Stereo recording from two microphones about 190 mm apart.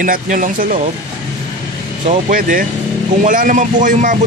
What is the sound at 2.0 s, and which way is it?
Speech, 40° right (ahead or behind).